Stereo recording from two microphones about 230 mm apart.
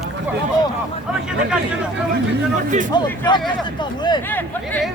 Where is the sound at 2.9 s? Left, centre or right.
Centre.